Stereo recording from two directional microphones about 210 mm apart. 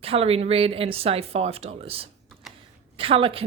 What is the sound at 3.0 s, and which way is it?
Speech, 25° right (ahead or behind).